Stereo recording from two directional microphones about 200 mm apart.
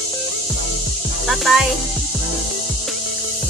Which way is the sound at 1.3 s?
Centre (ahead or behind).